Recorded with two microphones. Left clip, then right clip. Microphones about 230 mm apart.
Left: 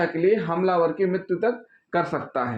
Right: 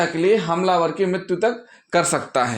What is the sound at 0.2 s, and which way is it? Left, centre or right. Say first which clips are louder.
Speech: right 3 dB; right.